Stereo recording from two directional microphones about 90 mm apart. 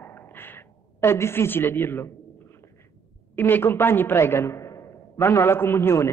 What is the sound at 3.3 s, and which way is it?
A man's voice, 25° left (ahead or behind).